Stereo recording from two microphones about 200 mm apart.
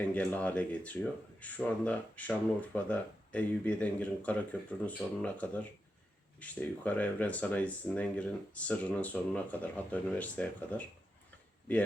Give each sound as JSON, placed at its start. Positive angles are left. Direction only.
{"t": 0.0, "sound": "speech", "side_deg": 10}